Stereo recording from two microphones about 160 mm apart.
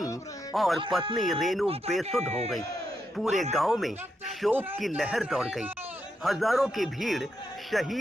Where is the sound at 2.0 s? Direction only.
45° right (ahead or behind).